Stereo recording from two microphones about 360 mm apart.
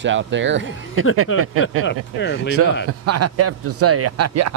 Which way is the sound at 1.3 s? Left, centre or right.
Left.